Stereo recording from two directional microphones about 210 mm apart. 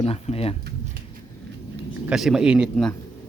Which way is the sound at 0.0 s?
30° left (ahead or behind).